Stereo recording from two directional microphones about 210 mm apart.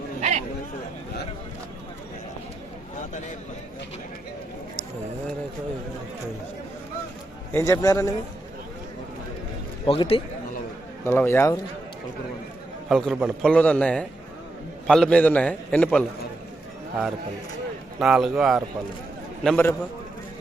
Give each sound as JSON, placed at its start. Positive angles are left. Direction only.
{"t": 0.2, "sound": "chatter", "side_deg": -35}
{"t": 7.5, "sound": "a man's voice", "side_deg": 15}
{"t": 9.8, "sound": "a man's voice", "side_deg": 25}
{"t": 11.0, "sound": "a man's voice", "side_deg": 10}
{"t": 12.9, "sound": "a man's voice", "side_deg": 0}
{"t": 18.0, "sound": "a man's voice", "side_deg": 0}
{"t": 19.5, "sound": "a man's voice", "side_deg": 10}